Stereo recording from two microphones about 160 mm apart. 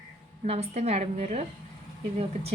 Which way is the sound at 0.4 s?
40° right (ahead or behind).